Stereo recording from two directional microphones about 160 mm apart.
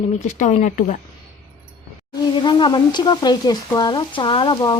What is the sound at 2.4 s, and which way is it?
Speech, 30° left (ahead or behind).